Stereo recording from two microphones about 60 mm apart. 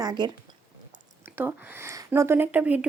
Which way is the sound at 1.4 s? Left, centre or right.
Right.